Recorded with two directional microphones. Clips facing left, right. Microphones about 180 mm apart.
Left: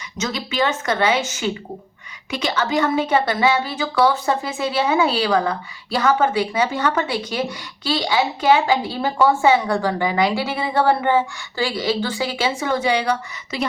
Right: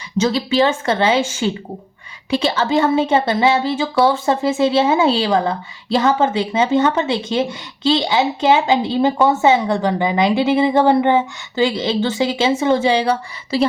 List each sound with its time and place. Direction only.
0.2 s speech: 30° right (ahead or behind)